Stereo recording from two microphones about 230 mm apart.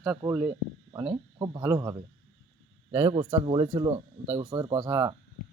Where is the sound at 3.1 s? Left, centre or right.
Right.